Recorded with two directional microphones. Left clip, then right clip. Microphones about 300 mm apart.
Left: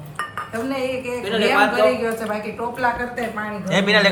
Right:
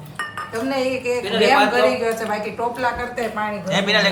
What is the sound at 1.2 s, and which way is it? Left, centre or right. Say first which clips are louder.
Speech: right 1 dB; centre.